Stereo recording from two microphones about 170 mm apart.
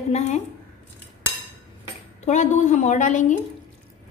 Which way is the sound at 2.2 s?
45° left (ahead or behind).